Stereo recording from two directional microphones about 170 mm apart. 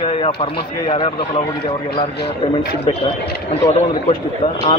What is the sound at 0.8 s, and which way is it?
A man's voice, 30° left (ahead or behind).